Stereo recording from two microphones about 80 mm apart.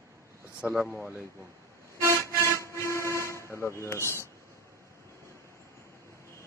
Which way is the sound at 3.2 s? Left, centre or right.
Left.